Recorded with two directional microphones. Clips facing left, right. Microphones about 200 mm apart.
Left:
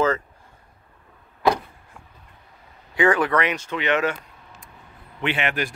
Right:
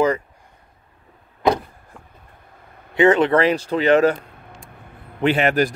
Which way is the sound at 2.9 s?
25° right (ahead or behind).